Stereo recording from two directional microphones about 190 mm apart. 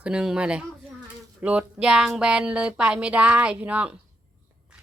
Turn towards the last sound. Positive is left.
turn(degrees=-5)  # may be behind; listen again after turning